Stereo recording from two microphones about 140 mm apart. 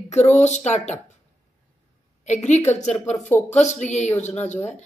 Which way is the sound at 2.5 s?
55° left (ahead or behind).